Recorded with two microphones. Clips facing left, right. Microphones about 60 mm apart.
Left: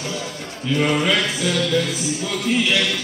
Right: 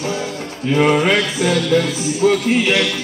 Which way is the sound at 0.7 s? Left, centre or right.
Right.